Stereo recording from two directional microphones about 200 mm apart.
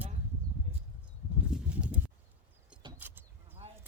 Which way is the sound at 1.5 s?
5° right (ahead or behind).